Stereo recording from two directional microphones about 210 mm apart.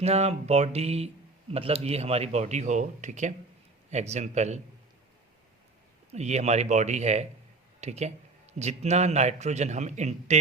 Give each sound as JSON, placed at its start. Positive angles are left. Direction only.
{"t": 0.0, "sound": "speech", "side_deg": -30}
{"t": 6.1, "sound": "speech", "side_deg": -30}